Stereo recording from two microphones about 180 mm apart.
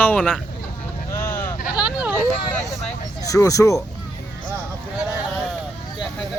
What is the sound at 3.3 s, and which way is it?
Speech, 20° left (ahead or behind).